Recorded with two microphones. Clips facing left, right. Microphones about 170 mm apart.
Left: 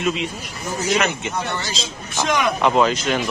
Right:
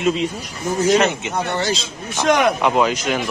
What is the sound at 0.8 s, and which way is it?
Speech, 30° right (ahead or behind).